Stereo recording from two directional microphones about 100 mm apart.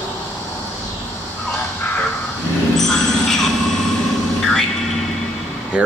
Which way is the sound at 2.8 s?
5° left (ahead or behind).